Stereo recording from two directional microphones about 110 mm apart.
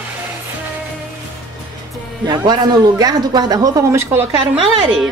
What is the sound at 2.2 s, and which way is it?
Speech, 40° right (ahead or behind).